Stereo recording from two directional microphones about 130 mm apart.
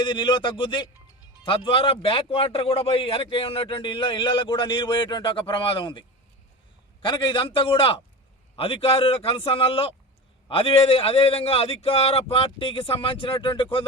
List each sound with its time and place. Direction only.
0.0 s a man's voice: 35° left (ahead or behind)